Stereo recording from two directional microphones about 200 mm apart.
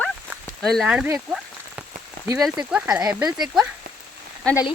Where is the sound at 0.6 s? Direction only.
Centre (ahead or behind).